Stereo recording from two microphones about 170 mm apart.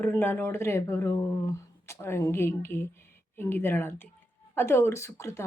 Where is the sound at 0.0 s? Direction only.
10° left (ahead or behind).